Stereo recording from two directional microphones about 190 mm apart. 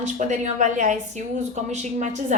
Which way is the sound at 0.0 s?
35° right (ahead or behind).